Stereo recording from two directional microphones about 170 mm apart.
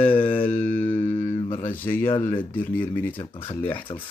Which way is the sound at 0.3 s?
10° left (ahead or behind).